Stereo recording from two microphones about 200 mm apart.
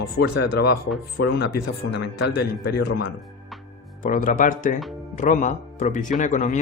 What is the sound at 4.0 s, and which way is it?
Speech, 40° left (ahead or behind).